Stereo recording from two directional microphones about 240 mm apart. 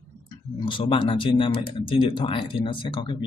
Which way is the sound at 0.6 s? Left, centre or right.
Centre.